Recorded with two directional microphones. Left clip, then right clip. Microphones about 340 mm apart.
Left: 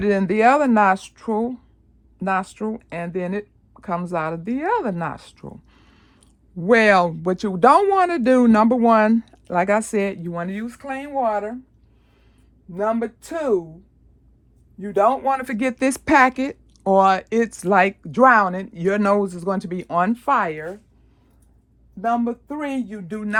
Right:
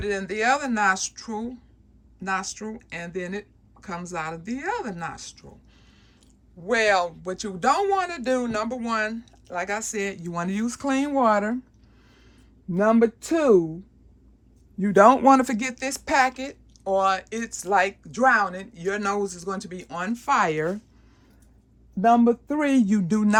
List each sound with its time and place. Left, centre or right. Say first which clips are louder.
0.0 s speech: left 8 dB; centre
12.7 s speech: right 3 dB; right
14.8 s speech: right 2 dB; right
15.5 s speech: left 6 dB; centre
15.8 s speech: left 6 dB; centre
22.0 s speech: right 3 dB; right